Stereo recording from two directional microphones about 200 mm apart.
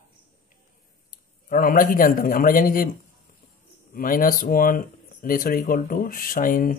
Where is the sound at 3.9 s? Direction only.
45° left (ahead or behind).